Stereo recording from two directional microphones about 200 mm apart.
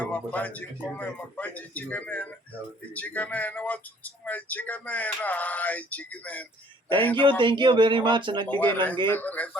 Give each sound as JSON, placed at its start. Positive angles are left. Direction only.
{"t": 0.0, "sound": "speech", "side_deg": 10}
{"t": 7.2, "sound": "speech", "side_deg": -25}
{"t": 8.5, "sound": "speech", "side_deg": 10}